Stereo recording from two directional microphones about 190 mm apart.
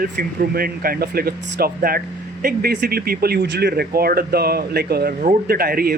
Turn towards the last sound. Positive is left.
turn(degrees=-50)  # may be behind; listen again after turning